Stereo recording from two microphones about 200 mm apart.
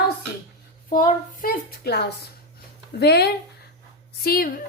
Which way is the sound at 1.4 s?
50° left (ahead or behind).